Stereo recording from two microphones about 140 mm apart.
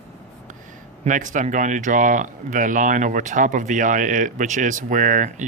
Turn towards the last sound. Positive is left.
turn(degrees=-65)  # may be behind; listen again after turning